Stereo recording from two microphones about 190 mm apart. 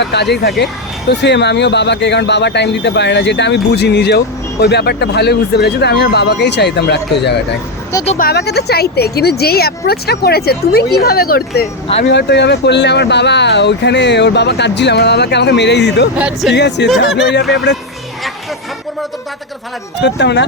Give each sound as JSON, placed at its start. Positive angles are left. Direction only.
{"t": 0.0, "sound": "speech", "side_deg": 60}
{"t": 12.0, "sound": "speech", "side_deg": 65}
{"t": 16.1, "sound": "speech", "side_deg": -5}
{"t": 16.6, "sound": "speech", "side_deg": 65}
{"t": 20.0, "sound": "speech", "side_deg": 65}